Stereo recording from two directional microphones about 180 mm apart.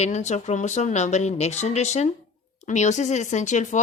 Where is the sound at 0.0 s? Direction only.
40° left (ahead or behind).